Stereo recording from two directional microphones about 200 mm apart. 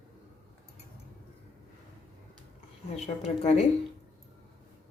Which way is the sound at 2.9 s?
30° left (ahead or behind).